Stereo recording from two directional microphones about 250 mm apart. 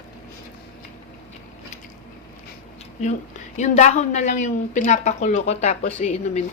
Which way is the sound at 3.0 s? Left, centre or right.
Left.